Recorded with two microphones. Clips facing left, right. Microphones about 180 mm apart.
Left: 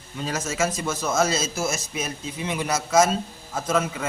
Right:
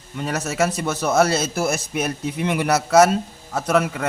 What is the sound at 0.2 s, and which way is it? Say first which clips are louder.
A man's voice: right 4 dB; 65° right (ahead or behind).